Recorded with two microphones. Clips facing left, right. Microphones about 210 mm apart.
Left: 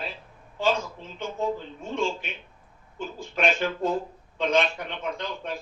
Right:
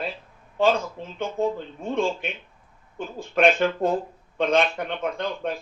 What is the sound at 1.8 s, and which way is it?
A man's voice, 55° right (ahead or behind).